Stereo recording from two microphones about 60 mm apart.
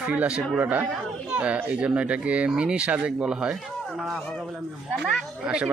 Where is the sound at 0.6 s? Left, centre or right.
Right; by 4.1 s centre.